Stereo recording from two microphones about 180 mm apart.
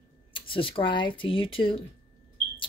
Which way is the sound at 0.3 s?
30° left (ahead or behind).